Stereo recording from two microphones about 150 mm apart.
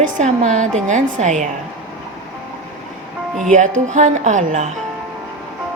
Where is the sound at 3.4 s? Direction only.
55° right (ahead or behind).